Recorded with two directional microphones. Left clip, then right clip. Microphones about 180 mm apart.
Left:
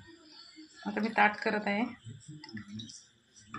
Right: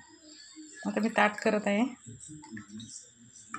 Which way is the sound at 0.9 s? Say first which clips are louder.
Even; 50° right (ahead or behind).